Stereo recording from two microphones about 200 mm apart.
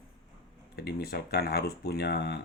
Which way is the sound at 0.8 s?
55° left (ahead or behind).